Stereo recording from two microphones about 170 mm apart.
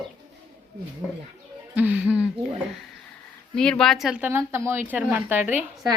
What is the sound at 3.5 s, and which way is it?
Speech, 5° left (ahead or behind).